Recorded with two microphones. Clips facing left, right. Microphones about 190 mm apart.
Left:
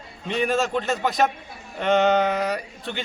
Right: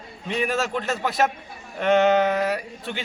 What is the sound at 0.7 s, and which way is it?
A man's voice, 5° right (ahead or behind).